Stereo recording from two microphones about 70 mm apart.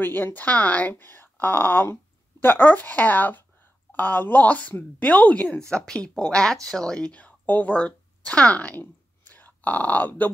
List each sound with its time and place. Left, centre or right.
0.0 s a woman's voice: left